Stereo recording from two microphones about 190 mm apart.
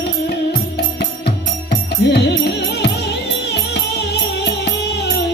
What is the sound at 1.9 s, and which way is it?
Music, 65° left (ahead or behind).